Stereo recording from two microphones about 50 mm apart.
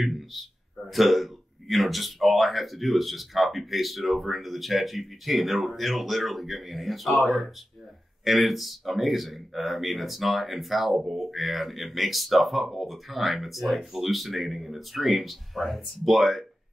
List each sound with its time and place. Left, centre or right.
0.0 s speech: centre